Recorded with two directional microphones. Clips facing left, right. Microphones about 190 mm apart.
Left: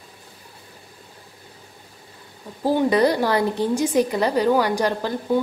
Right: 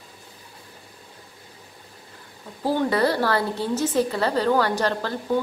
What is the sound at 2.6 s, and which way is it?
Speech, 15° left (ahead or behind).